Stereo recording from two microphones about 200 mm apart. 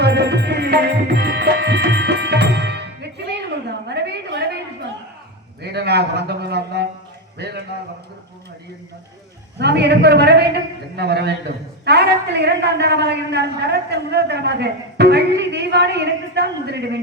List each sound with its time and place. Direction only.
0.0 s tabla: 55° right (ahead or behind)
3.7 s a sound: 55° right (ahead or behind)
5.6 s a man's voice: 55° right (ahead or behind)
9.6 s a man's voice: 55° right (ahead or behind)